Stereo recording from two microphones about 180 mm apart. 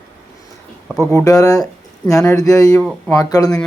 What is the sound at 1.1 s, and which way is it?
Speech, 20° left (ahead or behind).